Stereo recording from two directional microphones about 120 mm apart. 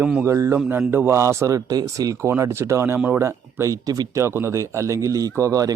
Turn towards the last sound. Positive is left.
turn(degrees=-30)  # may be behind; listen again after turning